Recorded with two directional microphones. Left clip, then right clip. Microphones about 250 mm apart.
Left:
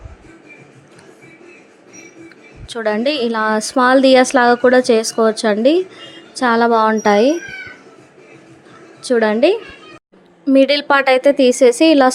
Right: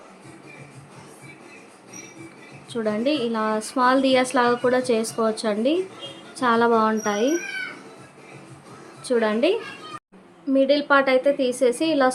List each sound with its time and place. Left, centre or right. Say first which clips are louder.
2.6 s a woman's voice: left 6 dB; left
9.0 s a woman's voice: left 8 dB; left